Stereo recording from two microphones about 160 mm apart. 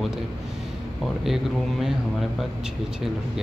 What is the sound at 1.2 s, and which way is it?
Speech, centre (ahead or behind).